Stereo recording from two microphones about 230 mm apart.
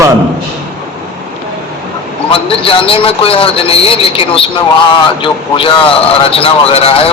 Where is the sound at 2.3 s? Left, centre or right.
Left.